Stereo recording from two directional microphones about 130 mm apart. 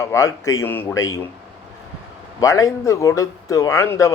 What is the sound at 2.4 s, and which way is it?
A man's voice, 25° left (ahead or behind).